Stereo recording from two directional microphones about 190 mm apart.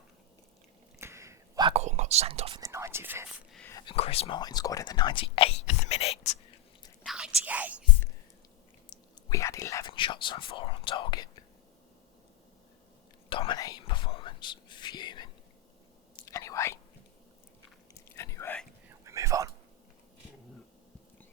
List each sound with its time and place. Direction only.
0.9 s a sound: 15° right (ahead or behind)
1.7 s whispering: 35° right (ahead or behind)
2.6 s speech: 15° right (ahead or behind)
3.7 s whispering: 20° left (ahead or behind)
3.9 s speech: 30° left (ahead or behind)
7.0 s whispering: 5° right (ahead or behind)
8.9 s whispering: 15° left (ahead or behind)
13.3 s whispering: 25° left (ahead or behind)
17.9 s chewing: 15° left (ahead or behind)
18.9 s whispering: 15° right (ahead or behind)